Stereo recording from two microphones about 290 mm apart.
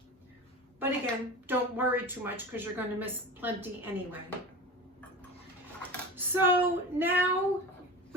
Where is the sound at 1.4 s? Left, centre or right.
Centre.